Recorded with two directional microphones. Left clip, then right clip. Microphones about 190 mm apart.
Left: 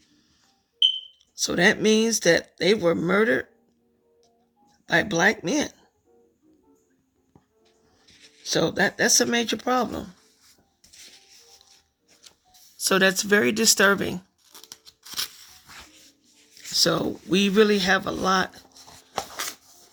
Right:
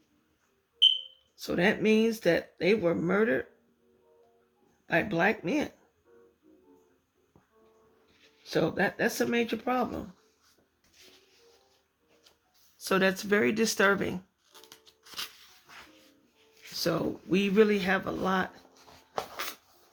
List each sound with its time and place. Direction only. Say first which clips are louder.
1.4 s speech: left 7 dB; 35° left (ahead or behind)
4.9 s speech: left 6 dB; 35° left (ahead or behind)
8.0 s music: left 9 dB; 65° left (ahead or behind)
8.4 s speech: left 5 dB; 35° left (ahead or behind)
10.9 s music: left 9 dB; 65° left (ahead or behind)
12.2 s a sound: left 11 dB; 65° left (ahead or behind)
12.8 s speech: left 6 dB; 30° left (ahead or behind)
14.5 s music: left 7 dB; 50° left (ahead or behind)
16.7 s speech: left 8 dB; 35° left (ahead or behind)
18.7 s a sound: left 5 dB; 60° left (ahead or behind)